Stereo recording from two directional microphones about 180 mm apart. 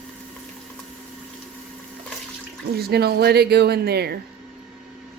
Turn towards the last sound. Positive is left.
turn(degrees=-60)  # may be behind; listen again after turning